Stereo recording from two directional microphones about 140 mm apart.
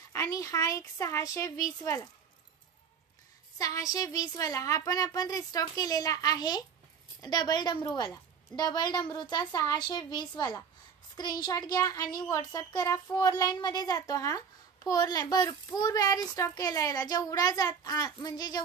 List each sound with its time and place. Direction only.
0.1 s a child's voice: 20° left (ahead or behind)
3.5 s a child's voice: 25° left (ahead or behind)